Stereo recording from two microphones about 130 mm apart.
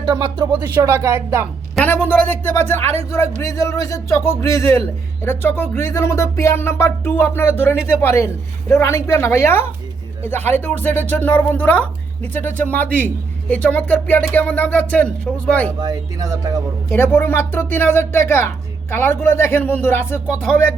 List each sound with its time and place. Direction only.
0.0 s speech: 30° right (ahead or behind)
1.8 s speech: 15° left (ahead or behind)
15.8 s speech: 30° right (ahead or behind)
16.9 s speech: 15° left (ahead or behind)